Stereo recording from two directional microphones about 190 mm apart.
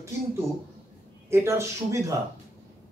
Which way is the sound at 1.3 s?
15° right (ahead or behind).